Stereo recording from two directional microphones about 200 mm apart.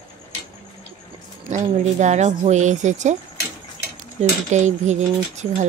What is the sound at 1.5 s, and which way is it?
Speech, 35° right (ahead or behind).